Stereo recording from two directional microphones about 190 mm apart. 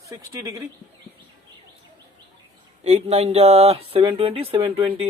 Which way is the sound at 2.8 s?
35° right (ahead or behind).